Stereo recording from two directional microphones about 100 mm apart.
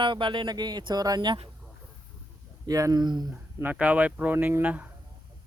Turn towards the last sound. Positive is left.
turn(degrees=-15)  # may be behind; listen again after turning